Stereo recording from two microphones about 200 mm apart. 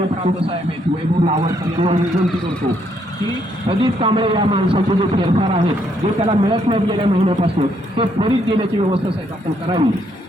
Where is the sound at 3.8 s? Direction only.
25° right (ahead or behind).